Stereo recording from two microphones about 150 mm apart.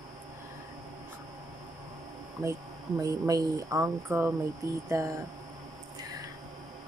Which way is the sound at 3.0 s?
20° right (ahead or behind).